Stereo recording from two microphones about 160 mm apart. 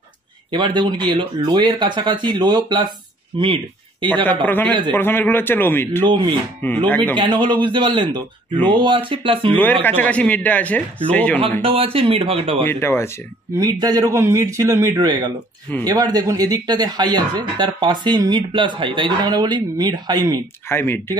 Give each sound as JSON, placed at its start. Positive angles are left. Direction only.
{"t": 0.5, "sound": "speech", "side_deg": -30}
{"t": 4.5, "sound": "a man's voice", "side_deg": 10}
{"t": 6.0, "sound": "speech", "side_deg": -30}
{"t": 6.6, "sound": "a man's voice", "side_deg": 10}
{"t": 7.2, "sound": "speech", "side_deg": -30}
{"t": 9.6, "sound": "a man's voice", "side_deg": 10}
{"t": 11.6, "sound": "speech", "side_deg": -35}
{"t": 12.6, "sound": "a man's voice", "side_deg": 15}
{"t": 13.6, "sound": "speech", "side_deg": -25}
{"t": 20.6, "sound": "a man's voice", "side_deg": 15}